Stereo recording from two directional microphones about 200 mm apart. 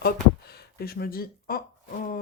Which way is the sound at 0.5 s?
50° left (ahead or behind).